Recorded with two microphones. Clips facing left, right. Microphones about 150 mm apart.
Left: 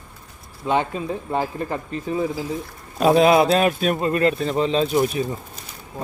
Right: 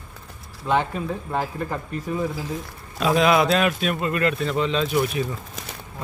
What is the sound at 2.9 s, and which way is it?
A man's voice, 40° left (ahead or behind).